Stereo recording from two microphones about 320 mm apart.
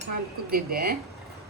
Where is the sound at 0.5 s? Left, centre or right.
Right.